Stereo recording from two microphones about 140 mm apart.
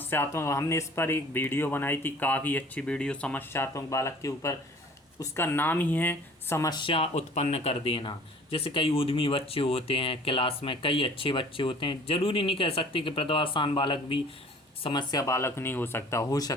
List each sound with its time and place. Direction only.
0.1 s speech: 15° left (ahead or behind)
3.5 s speech: 20° left (ahead or behind)
6.7 s speech: 35° left (ahead or behind)